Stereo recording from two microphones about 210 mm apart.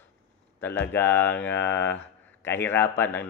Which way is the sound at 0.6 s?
10° left (ahead or behind).